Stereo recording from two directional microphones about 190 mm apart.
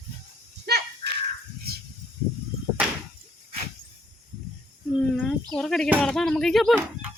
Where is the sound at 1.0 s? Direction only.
25° left (ahead or behind).